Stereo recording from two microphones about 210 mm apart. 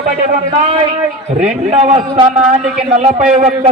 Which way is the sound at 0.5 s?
25° right (ahead or behind).